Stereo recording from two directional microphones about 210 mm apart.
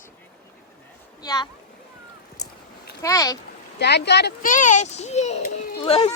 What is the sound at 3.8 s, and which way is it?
A child's voice, 55° left (ahead or behind).